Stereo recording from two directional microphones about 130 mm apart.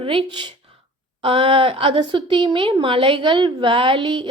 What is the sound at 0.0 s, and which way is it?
A woman's voice, 45° right (ahead or behind).